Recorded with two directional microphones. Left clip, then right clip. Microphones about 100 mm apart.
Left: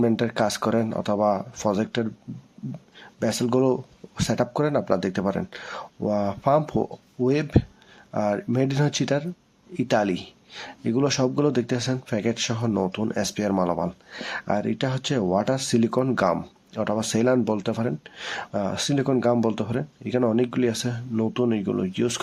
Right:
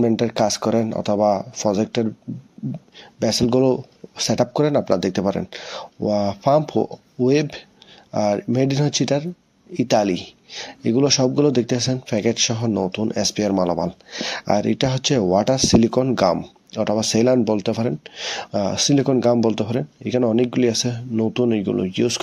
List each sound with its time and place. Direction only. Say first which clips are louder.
0.0 s speech: right 4 dB; 10° right (ahead or behind)
3.2 s speech: right 5 dB; 10° right (ahead or behind)
11.0 s speech: right 5 dB; 5° right (ahead or behind)